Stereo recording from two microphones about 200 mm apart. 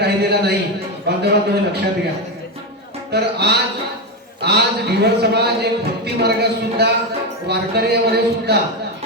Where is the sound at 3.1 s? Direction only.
55° right (ahead or behind).